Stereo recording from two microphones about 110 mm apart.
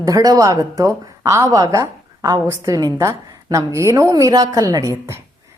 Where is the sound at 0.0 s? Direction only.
35° right (ahead or behind).